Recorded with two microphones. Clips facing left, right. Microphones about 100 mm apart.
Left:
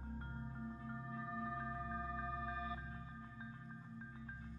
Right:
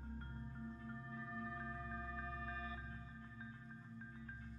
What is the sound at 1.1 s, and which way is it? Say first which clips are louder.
Music: left 5 dB; 15° left (ahead or behind).